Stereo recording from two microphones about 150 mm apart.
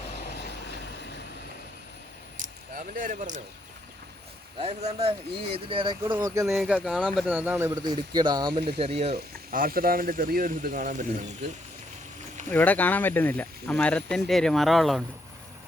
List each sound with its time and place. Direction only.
2.4 s a sound: 65° right (ahead or behind)
4.5 s speech: 45° right (ahead or behind)
6.4 s speech: 5° right (ahead or behind)
7.3 s a man's voice: 15° right (ahead or behind)
7.8 s speech: 30° right (ahead or behind)
8.8 s speech: 45° right (ahead or behind)
9.1 s speech: 75° right (ahead or behind)
12.5 s speech: 10° left (ahead or behind)